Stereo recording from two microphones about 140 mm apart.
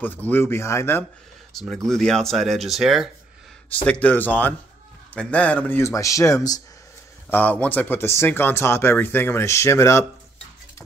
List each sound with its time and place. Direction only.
0.0 s speech: 15° left (ahead or behind)
1.5 s speech: centre (ahead or behind)
3.7 s a man's voice: 10° left (ahead or behind)
7.2 s speech: 15° left (ahead or behind)